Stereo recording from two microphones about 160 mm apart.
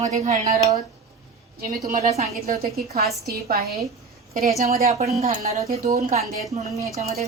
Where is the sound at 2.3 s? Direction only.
70° right (ahead or behind).